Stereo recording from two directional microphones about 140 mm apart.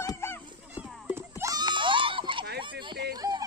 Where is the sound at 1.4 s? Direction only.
30° right (ahead or behind).